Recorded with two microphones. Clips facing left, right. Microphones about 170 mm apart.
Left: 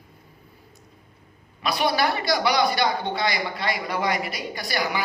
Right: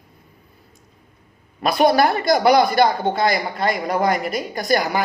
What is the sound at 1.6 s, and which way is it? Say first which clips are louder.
Speech: right 7 dB; 50° right (ahead or behind).